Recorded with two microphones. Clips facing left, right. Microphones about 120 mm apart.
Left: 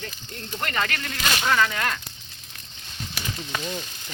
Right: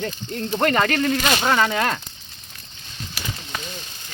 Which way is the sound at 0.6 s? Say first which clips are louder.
Right 9 dB; 45° right (ahead or behind).